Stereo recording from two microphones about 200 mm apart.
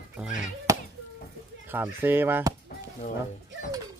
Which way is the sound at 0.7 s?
15° right (ahead or behind).